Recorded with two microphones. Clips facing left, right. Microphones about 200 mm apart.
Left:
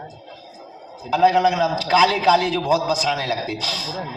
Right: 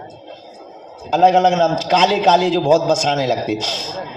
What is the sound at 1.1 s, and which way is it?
A man's voice, 50° right (ahead or behind).